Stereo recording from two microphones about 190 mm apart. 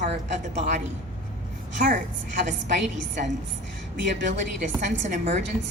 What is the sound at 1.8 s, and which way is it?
Speech, 45° right (ahead or behind).